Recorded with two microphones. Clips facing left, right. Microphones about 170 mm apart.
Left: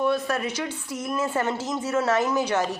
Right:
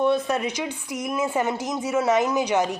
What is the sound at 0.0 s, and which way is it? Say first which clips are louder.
A woman's voice: right 2 dB; 20° right (ahead or behind).